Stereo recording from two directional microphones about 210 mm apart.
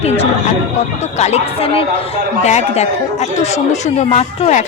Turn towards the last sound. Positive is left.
turn(degrees=30)  # may be behind; listen again after turning